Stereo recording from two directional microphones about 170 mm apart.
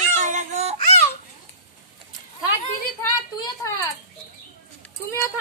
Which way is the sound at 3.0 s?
15° left (ahead or behind).